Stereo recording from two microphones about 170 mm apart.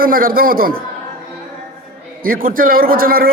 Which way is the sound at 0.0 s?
55° right (ahead or behind).